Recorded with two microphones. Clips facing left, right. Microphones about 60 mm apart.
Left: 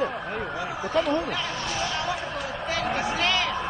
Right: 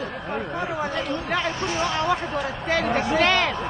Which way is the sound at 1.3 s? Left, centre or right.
Right.